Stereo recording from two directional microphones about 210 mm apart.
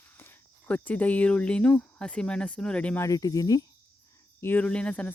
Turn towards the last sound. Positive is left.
turn(degrees=5)  # may be behind; listen again after turning